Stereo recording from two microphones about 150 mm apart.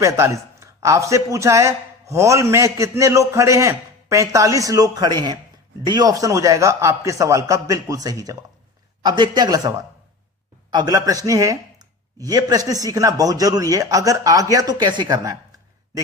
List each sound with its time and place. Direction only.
0.0 s a man's voice: 20° right (ahead or behind)